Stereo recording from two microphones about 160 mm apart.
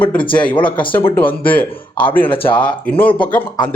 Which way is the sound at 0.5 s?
30° left (ahead or behind).